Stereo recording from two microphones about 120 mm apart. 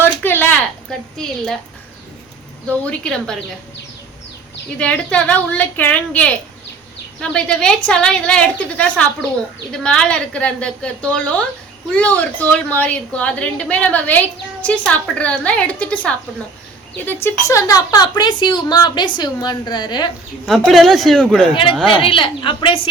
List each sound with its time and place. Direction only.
0.0 s a sound: 15° left (ahead or behind)
0.9 s speech: 5° left (ahead or behind)
2.6 s a woman's voice: 10° left (ahead or behind)
4.8 s a woman's voice: 10° left (ahead or behind)
17.2 s a woman's voice: 30° left (ahead or behind)
20.5 s speech: centre (ahead or behind)
21.5 s a woman's voice: 45° left (ahead or behind)